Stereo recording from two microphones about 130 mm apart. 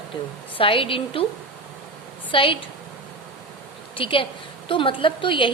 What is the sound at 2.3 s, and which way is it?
Speech, 40° left (ahead or behind).